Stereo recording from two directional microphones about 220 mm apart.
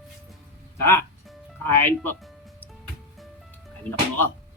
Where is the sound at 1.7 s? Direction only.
10° left (ahead or behind).